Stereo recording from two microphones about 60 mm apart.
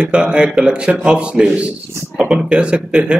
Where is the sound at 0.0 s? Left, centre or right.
Centre.